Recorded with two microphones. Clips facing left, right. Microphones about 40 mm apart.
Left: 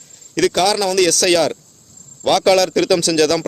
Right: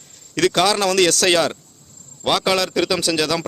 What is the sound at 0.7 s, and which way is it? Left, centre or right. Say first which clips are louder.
Speech: left 1 dB; right.